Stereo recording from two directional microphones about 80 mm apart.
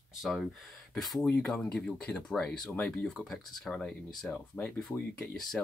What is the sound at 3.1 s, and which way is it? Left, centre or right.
Speech, centre.